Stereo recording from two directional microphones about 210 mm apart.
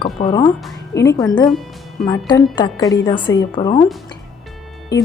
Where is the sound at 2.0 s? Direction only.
20° left (ahead or behind).